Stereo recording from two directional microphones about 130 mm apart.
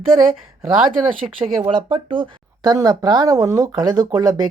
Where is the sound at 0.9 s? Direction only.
40° right (ahead or behind).